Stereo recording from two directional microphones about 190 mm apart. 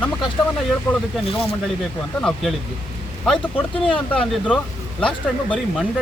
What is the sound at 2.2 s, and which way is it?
Speech, 5° left (ahead or behind).